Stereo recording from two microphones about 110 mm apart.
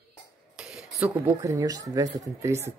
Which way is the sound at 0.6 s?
5° right (ahead or behind).